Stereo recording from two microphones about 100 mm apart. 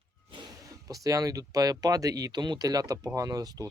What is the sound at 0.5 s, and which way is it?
Speech, 35° right (ahead or behind).